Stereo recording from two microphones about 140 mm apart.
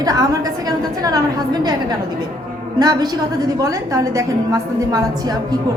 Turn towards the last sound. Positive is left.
turn(degrees=-25)  # may be behind; listen again after turning